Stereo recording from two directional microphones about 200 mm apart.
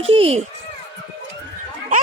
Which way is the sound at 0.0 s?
30° right (ahead or behind).